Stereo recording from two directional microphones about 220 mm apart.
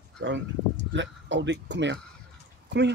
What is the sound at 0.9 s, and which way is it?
Speech, 55° right (ahead or behind).